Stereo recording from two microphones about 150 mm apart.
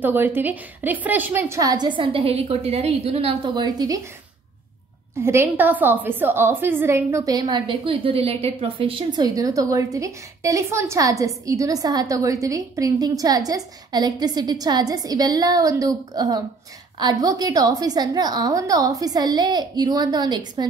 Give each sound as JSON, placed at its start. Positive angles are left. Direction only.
{"t": 0.0, "sound": "a woman's voice", "side_deg": -15}
{"t": 5.2, "sound": "a woman's voice", "side_deg": -15}